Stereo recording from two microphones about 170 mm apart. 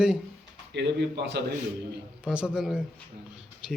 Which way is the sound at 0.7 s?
85° right.